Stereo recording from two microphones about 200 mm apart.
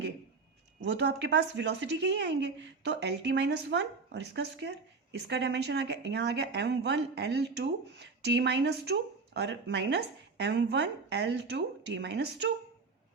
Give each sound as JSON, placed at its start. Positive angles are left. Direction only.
{"t": 0.8, "sound": "speech", "side_deg": -60}